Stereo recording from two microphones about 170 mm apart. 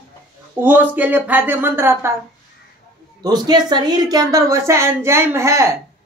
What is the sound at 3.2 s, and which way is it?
A woman's voice, 25° right (ahead or behind).